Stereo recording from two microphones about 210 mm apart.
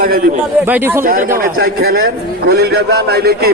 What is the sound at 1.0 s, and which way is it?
A man's voice, 40° right (ahead or behind).